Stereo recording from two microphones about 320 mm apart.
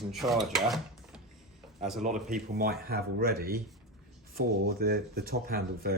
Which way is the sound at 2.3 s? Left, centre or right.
Right.